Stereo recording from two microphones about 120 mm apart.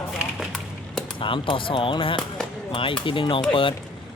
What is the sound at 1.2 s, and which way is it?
Speech, 45° left (ahead or behind).